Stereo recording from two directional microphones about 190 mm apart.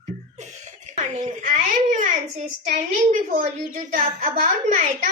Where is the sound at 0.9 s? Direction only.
40° right (ahead or behind).